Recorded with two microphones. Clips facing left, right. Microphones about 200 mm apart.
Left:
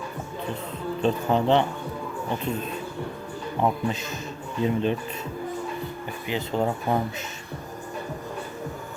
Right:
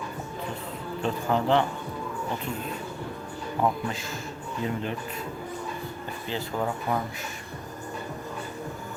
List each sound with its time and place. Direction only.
1.0 s speech: 20° left (ahead or behind)
3.6 s speech: 20° left (ahead or behind)
6.2 s speech: 20° left (ahead or behind)